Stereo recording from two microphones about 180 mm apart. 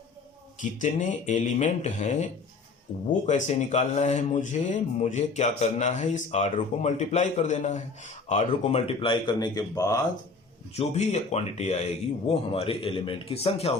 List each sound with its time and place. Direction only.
0.6 s speech: 45° left (ahead or behind); by 10.0 s 20° left (ahead or behind)
10.8 s speech: 40° left (ahead or behind)